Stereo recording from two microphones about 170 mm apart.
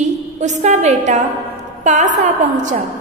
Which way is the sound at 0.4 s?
45° right (ahead or behind).